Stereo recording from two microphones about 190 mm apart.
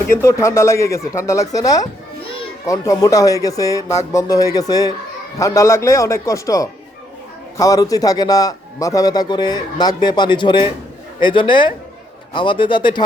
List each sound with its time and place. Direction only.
0.2 s a man's voice: 15° left (ahead or behind)